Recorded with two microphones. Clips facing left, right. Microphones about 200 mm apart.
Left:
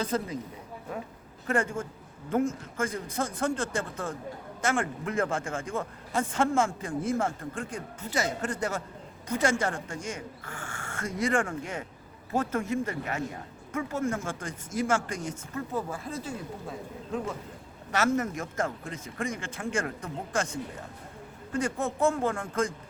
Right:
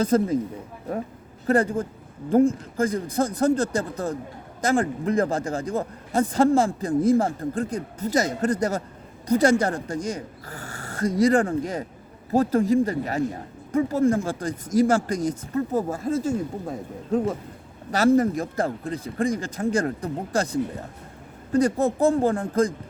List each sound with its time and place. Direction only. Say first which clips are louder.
0.0 s speech: right 10 dB; 45° right (ahead or behind)
1.5 s speech: right 7 dB; 35° right (ahead or behind)